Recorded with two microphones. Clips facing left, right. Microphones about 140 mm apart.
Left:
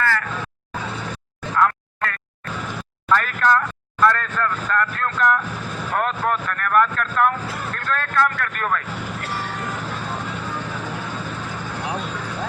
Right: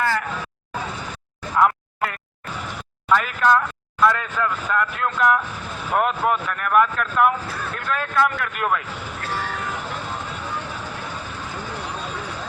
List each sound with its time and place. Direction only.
0.0 s vehicle: 15° right (ahead or behind)
1.5 s a sound: 15° right (ahead or behind)
3.1 s a man's voice: 5° right (ahead or behind)